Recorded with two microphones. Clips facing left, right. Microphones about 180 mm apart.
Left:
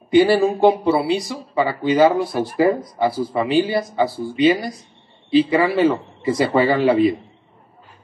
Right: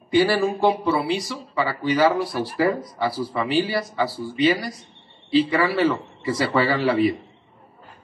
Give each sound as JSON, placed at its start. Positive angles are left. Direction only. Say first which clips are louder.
{"t": 0.1, "sound": "speech", "louder": "left 5 dB", "side_deg": 20}